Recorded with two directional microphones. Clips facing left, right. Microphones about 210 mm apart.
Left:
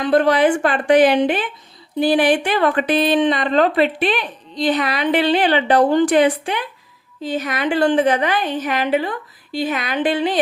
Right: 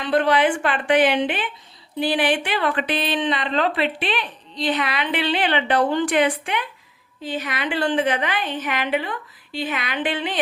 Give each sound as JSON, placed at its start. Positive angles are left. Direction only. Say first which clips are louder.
{"t": 0.0, "sound": "a woman's voice", "louder": "left 4 dB", "side_deg": 45}